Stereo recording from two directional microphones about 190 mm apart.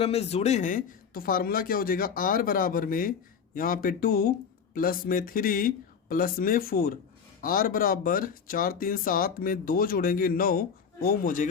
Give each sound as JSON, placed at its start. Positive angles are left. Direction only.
{"t": 0.0, "sound": "speech", "side_deg": 35}